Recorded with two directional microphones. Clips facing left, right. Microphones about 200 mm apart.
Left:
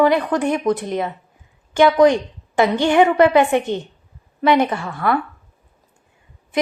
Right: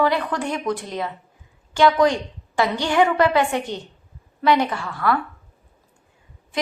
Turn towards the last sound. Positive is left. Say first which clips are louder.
# left 2 dB
turn(degrees=20)  # may be behind; listen again after turning